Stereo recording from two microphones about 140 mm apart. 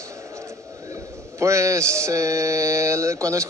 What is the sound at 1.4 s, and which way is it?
A man's voice, 20° right (ahead or behind).